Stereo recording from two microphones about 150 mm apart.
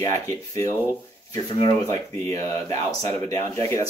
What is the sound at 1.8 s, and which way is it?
Speech, 15° left (ahead or behind).